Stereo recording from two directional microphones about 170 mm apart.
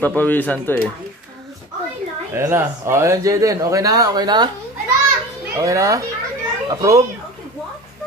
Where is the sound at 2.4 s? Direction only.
15° right (ahead or behind).